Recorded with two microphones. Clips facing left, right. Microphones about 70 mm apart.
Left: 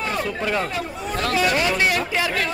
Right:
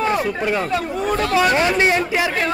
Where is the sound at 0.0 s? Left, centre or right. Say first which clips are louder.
Right 5 dB; centre.